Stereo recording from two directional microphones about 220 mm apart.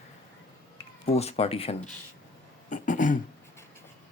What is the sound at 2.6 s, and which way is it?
Throat clearing, 35° left (ahead or behind).